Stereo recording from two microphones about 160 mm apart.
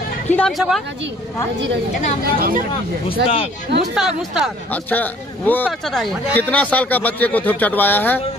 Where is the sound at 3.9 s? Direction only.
5° right (ahead or behind).